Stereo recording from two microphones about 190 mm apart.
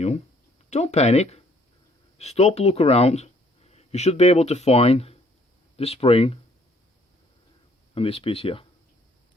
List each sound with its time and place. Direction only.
0.7 s speech: 35° left (ahead or behind)
7.9 s speech: 30° left (ahead or behind)